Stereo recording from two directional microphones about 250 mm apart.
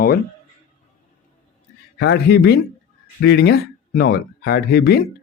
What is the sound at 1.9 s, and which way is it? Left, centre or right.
A man's voice, left.